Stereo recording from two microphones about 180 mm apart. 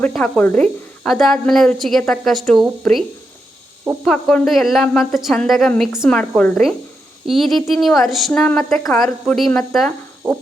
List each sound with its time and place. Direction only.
0.0 s speech: 5° left (ahead or behind)
4.0 s speech: centre (ahead or behind)